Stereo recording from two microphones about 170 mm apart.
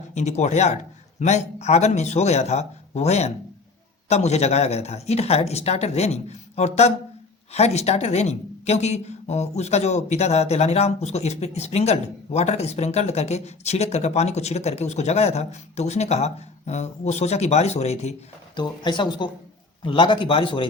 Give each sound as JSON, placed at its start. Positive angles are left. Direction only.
{"t": 0.1, "sound": "a woman's voice", "side_deg": 45}
{"t": 18.5, "sound": "a woman's voice", "side_deg": 25}